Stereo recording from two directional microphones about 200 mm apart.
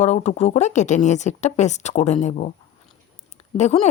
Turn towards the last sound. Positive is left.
turn(degrees=35)  # may be behind; listen again after turning